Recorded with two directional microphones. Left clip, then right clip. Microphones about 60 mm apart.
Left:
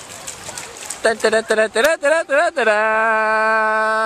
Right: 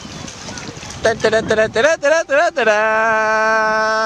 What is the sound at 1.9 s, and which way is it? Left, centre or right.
Speech, right.